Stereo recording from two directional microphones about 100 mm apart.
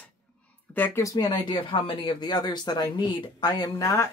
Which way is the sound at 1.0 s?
40° left (ahead or behind).